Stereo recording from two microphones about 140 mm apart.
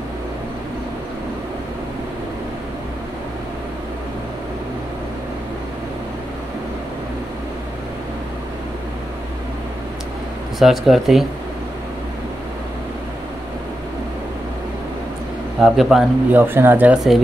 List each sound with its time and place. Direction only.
10.6 s a man's voice: centre (ahead or behind)
15.6 s a man's voice: centre (ahead or behind)
16.3 s speech: 15° right (ahead or behind)